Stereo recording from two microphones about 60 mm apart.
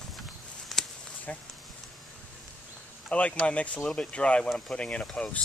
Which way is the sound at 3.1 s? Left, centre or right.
Left.